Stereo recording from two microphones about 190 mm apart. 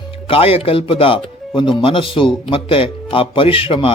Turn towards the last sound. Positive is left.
turn(degrees=30)  # may be behind; listen again after turning